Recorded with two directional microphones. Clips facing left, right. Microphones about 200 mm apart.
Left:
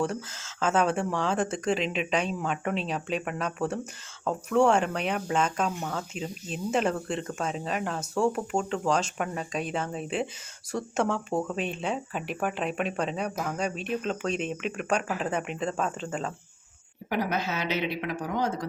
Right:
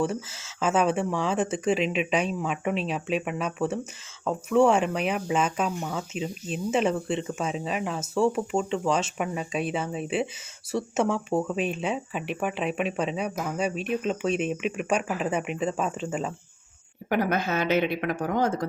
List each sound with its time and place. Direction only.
0.0 s speech: 5° right (ahead or behind)
17.1 s speech: 50° right (ahead or behind)